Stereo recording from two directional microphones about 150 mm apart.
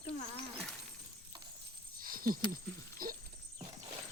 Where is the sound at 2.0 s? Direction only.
70° right (ahead or behind).